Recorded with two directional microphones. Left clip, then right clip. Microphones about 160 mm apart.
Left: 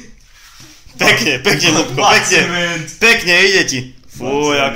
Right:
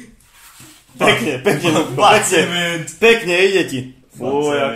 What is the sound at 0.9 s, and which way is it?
Speech, 5° right (ahead or behind).